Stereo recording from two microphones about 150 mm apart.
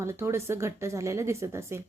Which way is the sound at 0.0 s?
15° right (ahead or behind).